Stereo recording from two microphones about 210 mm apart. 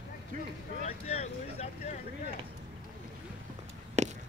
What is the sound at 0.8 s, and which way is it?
Speech, 30° left (ahead or behind).